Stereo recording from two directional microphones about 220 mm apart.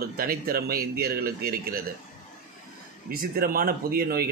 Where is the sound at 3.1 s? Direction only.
40° right (ahead or behind).